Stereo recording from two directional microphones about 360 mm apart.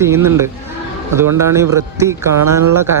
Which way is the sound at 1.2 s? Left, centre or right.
Right.